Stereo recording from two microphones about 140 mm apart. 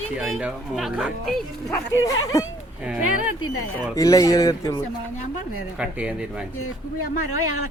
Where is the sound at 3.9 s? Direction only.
25° left (ahead or behind).